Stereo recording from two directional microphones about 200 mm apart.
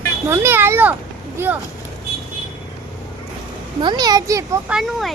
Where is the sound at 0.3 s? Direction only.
10° right (ahead or behind).